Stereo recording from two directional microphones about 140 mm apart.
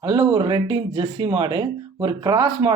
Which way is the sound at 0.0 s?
35° right (ahead or behind).